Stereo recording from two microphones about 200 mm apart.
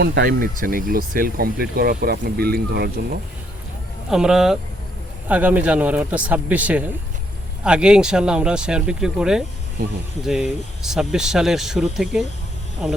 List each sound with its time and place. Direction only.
0.0 s speech: 55° right (ahead or behind)
4.1 s a man's voice: 5° right (ahead or behind)